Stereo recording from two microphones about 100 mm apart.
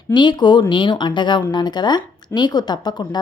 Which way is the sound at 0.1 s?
50° left (ahead or behind).